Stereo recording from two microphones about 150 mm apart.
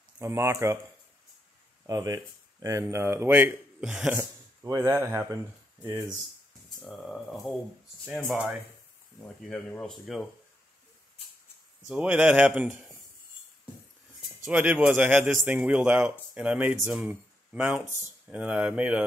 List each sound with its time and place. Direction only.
0.2 s speech: 15° right (ahead or behind)
1.9 s speech: 25° right (ahead or behind); by 4.2 s 5° right (ahead or behind)
4.2 s speech: 20° right (ahead or behind)
7.1 s speech: centre (ahead or behind)
8.0 s speech: 15° right (ahead or behind); by 10.2 s centre (ahead or behind)
11.8 s speech: 10° right (ahead or behind)
14.5 s speech: 10° right (ahead or behind)